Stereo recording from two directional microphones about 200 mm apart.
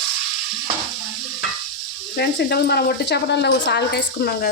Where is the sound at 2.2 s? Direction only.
55° left (ahead or behind).